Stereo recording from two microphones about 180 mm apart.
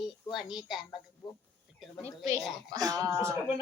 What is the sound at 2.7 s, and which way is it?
Speech, 20° right (ahead or behind).